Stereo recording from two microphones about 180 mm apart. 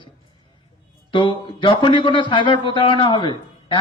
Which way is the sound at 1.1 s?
25° left (ahead or behind).